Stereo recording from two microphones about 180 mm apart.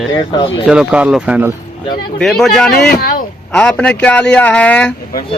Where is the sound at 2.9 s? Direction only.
50° left (ahead or behind).